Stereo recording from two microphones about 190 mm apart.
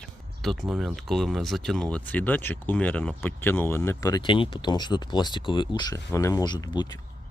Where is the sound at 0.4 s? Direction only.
Centre (ahead or behind).